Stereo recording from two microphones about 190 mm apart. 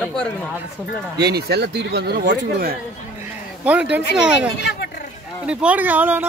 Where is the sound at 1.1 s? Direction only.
60° right (ahead or behind).